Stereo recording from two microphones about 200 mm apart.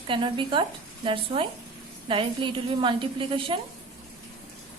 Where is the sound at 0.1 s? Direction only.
25° right (ahead or behind).